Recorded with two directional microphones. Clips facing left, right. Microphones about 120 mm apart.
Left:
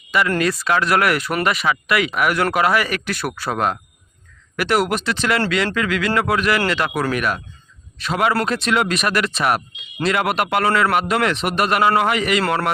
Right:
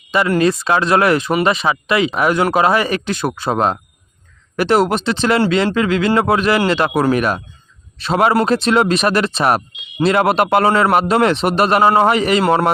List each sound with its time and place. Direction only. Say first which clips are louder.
0.3 s speech: right 4 dB; 25° right (ahead or behind)
12.4 s speech: right 6 dB; 20° right (ahead or behind)